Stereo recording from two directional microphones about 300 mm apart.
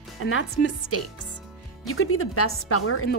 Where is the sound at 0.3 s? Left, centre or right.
Left.